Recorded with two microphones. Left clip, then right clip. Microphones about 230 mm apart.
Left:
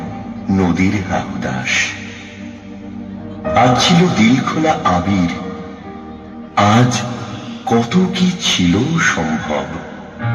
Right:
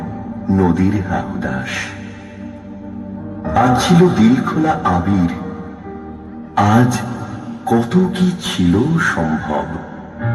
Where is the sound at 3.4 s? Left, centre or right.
Right.